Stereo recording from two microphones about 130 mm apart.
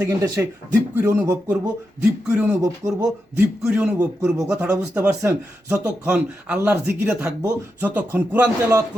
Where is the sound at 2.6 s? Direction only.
25° right (ahead or behind).